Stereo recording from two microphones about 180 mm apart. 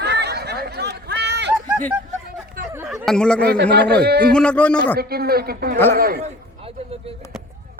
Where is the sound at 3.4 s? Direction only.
60° right (ahead or behind).